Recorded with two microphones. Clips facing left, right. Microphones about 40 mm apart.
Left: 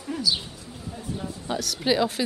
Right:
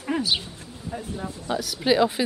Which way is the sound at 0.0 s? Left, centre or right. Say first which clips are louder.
Right 2 dB; right.